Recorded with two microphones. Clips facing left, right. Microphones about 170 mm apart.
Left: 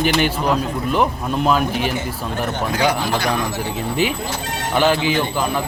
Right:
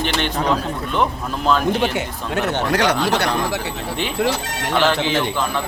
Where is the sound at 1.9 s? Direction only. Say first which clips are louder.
Right 1 dB; 70° right (ahead or behind).